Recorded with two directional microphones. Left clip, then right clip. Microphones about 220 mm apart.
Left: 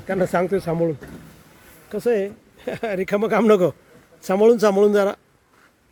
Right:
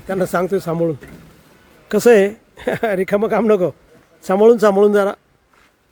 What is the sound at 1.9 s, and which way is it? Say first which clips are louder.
Speech: right 10 dB; 45° right (ahead or behind).